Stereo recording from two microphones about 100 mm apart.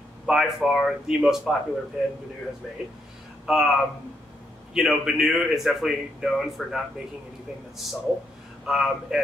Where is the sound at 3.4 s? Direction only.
5° right (ahead or behind).